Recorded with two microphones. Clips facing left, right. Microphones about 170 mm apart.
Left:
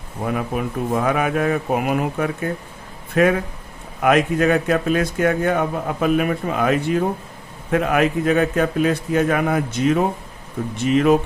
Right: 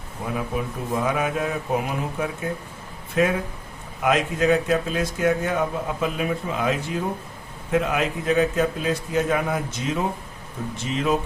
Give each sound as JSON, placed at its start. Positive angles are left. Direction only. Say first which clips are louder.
{"t": 0.3, "sound": "speech", "louder": "left 4 dB", "side_deg": 60}